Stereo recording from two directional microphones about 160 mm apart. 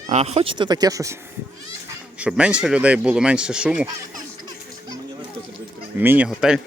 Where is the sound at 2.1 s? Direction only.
5° right (ahead or behind).